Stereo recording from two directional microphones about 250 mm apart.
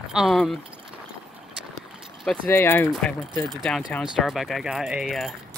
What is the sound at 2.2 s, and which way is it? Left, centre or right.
Speech, centre.